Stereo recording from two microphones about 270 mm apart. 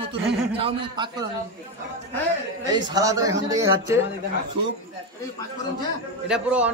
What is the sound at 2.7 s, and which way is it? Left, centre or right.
Speech, centre.